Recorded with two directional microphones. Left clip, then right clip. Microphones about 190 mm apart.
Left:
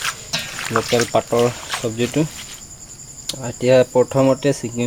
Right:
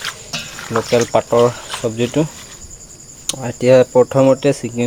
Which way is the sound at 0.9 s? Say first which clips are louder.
Right 5 dB; 5° right (ahead or behind).